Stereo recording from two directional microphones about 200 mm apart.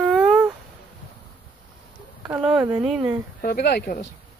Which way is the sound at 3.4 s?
50° left (ahead or behind).